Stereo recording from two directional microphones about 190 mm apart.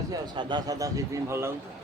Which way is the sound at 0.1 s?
25° right (ahead or behind).